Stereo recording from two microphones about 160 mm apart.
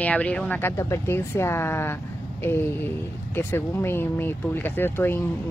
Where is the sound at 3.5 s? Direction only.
15° left (ahead or behind).